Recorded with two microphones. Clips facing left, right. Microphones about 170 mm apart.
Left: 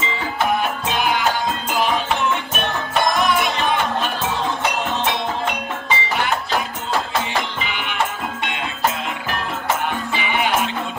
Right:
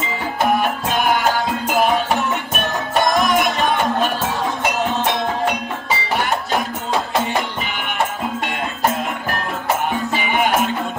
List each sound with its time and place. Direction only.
0.6 s music: 45° right (ahead or behind)
3.2 s music: 40° right (ahead or behind)
8.5 s music: 45° right (ahead or behind)